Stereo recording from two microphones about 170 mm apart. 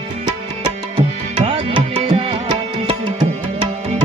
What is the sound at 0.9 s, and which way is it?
Tabla, 30° right (ahead or behind).